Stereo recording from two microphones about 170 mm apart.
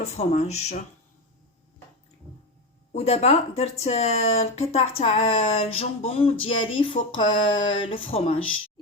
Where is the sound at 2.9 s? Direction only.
40° left (ahead or behind).